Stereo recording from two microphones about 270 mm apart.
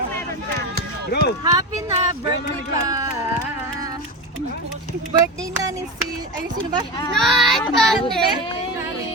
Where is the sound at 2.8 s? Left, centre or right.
Centre.